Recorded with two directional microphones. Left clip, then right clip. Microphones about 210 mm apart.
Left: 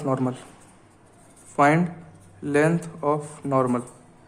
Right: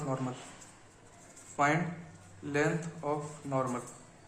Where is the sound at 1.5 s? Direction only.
50° left (ahead or behind).